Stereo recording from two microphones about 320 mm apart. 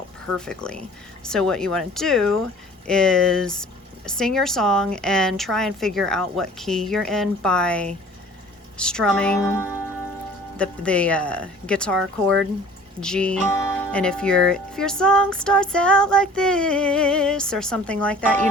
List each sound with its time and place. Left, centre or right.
0.3 s speech: centre